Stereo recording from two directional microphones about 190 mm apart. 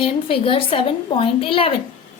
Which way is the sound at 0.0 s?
30° left (ahead or behind).